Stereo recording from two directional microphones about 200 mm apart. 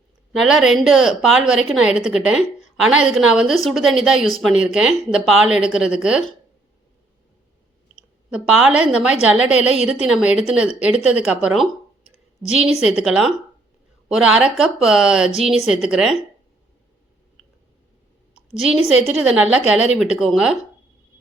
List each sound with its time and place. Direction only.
0.3 s speech: centre (ahead or behind)
2.6 s a sound: 5° right (ahead or behind)
3.2 s speech: 5° right (ahead or behind)
8.3 s speech: 5° right (ahead or behind)
12.4 s a woman's voice: 25° right (ahead or behind)
12.8 s speech: 5° right (ahead or behind)
19.0 s speech: 5° right (ahead or behind)